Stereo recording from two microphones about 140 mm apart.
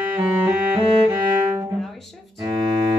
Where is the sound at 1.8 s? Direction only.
Centre (ahead or behind).